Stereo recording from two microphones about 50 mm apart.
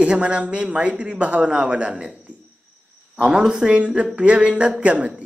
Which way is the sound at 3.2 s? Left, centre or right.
Centre.